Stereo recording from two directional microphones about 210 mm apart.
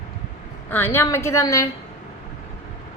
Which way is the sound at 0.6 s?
10° left (ahead or behind).